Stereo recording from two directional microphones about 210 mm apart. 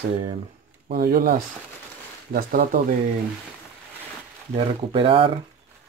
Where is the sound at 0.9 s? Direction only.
45° right (ahead or behind).